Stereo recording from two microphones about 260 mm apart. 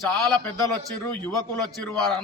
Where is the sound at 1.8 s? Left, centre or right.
Centre.